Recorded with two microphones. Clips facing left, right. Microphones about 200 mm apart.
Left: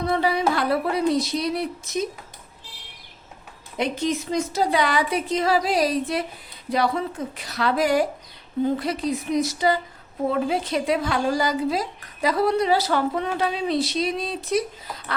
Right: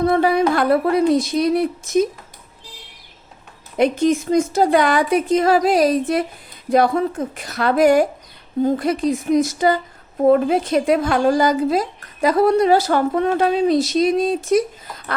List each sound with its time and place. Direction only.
0.0 s speech: 50° right (ahead or behind)
3.8 s speech: 50° right (ahead or behind)